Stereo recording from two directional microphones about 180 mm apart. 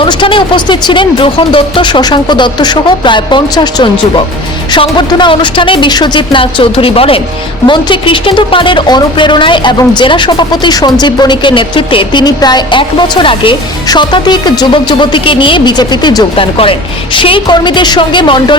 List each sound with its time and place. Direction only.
0.0 s speech: 30° left (ahead or behind)